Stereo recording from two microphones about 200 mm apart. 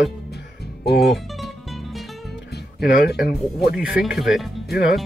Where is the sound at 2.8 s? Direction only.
50° left (ahead or behind).